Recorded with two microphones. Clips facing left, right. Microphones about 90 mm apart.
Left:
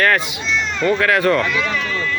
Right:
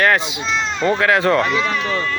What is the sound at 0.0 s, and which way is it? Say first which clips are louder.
Speech: right 1 dB; 20° right (ahead or behind).